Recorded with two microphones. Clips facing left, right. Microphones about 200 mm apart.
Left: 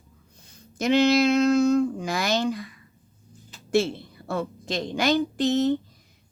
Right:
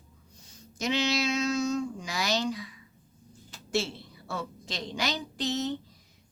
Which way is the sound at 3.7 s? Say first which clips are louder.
Left 8 dB; 55° left (ahead or behind).